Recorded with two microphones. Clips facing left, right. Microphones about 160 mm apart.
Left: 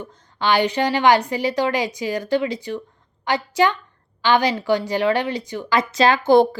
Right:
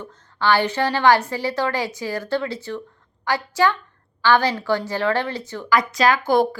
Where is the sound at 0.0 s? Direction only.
15° left (ahead or behind).